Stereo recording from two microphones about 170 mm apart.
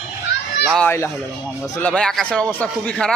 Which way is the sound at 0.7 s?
10° left (ahead or behind).